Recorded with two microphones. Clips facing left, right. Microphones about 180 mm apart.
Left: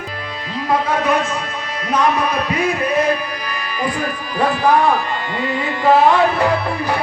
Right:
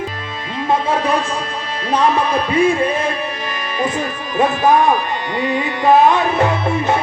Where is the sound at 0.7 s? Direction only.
30° right (ahead or behind).